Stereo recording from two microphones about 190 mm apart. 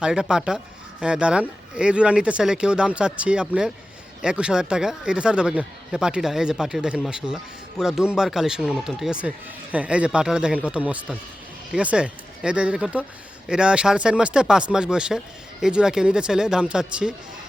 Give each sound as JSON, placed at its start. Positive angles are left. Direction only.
{"t": 0.0, "sound": "speech", "side_deg": -5}